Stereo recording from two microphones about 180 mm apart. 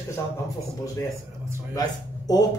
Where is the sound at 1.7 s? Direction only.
20° left (ahead or behind).